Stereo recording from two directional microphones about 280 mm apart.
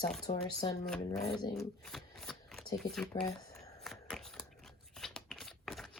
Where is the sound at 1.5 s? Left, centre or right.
Centre.